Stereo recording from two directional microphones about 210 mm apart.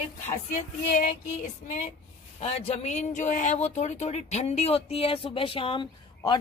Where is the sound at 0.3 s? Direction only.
40° left (ahead or behind).